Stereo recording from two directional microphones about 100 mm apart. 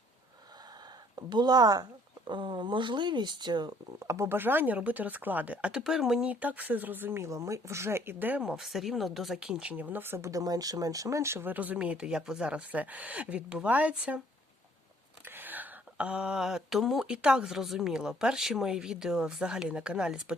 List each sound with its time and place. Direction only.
1.1 s speech: 45° right (ahead or behind)
4.0 s speech: 30° right (ahead or behind); by 6.2 s 5° right (ahead or behind)
6.2 s speech: 15° right (ahead or behind)
8.4 s speech: 5° right (ahead or behind)
15.2 s speech: 20° right (ahead or behind)